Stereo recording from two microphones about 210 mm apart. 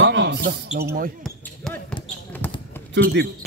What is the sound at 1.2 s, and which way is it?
Basketball bounce, 5° left (ahead or behind).